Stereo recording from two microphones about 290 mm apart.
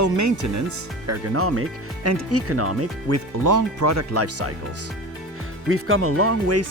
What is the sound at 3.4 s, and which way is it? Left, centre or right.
Speech, right.